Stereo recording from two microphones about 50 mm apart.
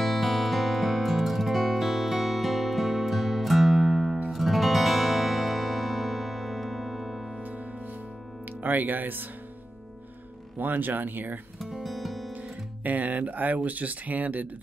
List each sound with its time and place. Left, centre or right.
0.0 s music: centre
8.6 s speech: right
10.6 s speech: right
11.6 s music: centre
12.8 s speech: right